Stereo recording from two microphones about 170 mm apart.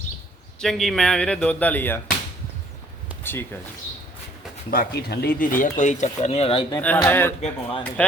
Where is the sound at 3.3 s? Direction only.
15° left (ahead or behind).